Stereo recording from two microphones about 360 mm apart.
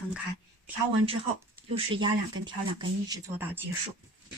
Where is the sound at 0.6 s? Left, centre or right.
Centre.